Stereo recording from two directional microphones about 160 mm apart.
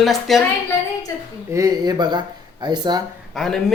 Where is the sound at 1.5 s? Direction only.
20° right (ahead or behind).